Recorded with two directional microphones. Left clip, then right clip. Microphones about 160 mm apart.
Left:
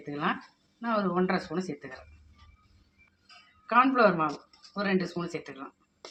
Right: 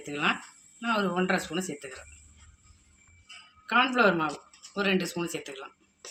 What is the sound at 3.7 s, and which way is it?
Speech, 35° left (ahead or behind).